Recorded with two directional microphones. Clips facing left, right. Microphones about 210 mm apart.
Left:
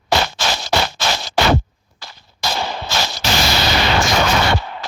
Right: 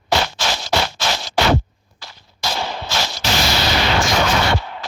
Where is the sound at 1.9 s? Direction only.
45° left (ahead or behind).